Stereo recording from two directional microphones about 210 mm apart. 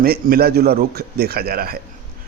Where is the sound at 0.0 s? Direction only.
45° right (ahead or behind).